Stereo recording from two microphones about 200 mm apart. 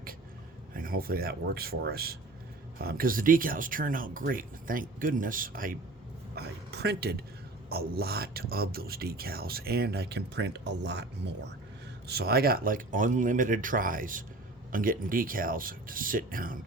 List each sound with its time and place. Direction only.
0.8 s a man's voice: 45° right (ahead or behind)
6.3 s a man's voice: 55° right (ahead or behind)
12.0 s a man's voice: 50° right (ahead or behind)